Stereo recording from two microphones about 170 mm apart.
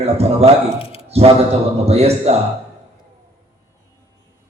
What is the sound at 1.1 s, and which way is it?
A man's voice, 35° right (ahead or behind).